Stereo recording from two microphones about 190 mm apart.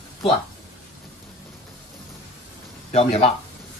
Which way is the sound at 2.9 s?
35° left (ahead or behind).